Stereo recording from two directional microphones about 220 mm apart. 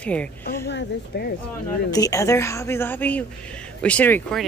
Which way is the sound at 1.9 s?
15° left (ahead or behind).